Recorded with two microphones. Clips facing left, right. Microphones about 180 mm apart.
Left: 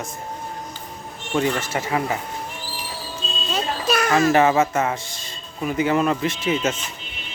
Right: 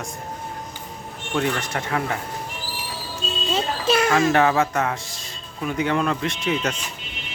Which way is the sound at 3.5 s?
25° right (ahead or behind).